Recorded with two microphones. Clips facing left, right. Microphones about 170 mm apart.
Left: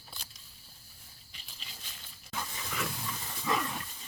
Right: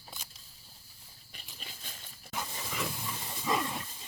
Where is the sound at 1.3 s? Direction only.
50° right (ahead or behind).